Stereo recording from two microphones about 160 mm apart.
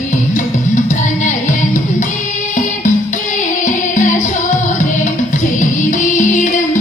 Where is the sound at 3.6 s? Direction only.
50° left (ahead or behind).